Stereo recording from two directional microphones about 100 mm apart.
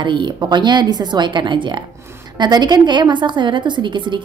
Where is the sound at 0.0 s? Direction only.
50° right (ahead or behind).